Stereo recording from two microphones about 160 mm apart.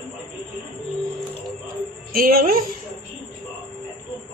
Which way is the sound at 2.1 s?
65° right (ahead or behind).